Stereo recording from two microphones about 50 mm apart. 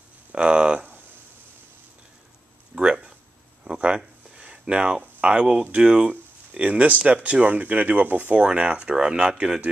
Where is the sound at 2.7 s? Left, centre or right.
Centre.